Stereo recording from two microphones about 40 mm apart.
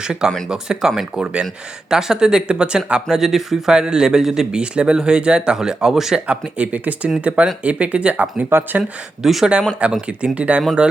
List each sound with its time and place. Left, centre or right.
0.0 s speech: centre
0.3 s speech: centre
0.5 s speech: centre
1.1 s speech: right
3.1 s speech: centre
4.6 s speech: right
6.1 s speech: right
8.4 s speech: right
8.8 s speech: centre
9.8 s speech: right